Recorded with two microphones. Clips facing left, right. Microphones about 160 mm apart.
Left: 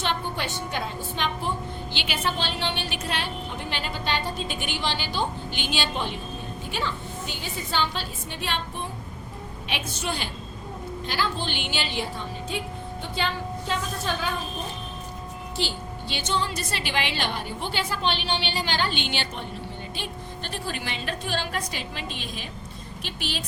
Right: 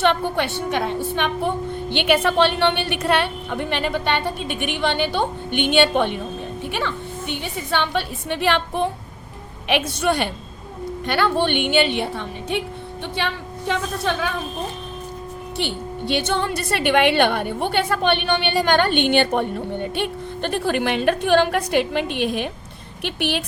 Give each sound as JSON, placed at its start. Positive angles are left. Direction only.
{"t": 0.0, "sound": "a woman's voice", "side_deg": -65}
{"t": 15.5, "sound": "a woman's voice", "side_deg": -60}